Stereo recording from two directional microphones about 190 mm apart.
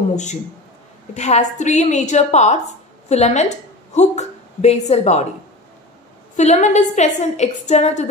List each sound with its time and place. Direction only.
0.1 s a man's voice: 40° left (ahead or behind)
6.3 s a woman's voice: 40° left (ahead or behind)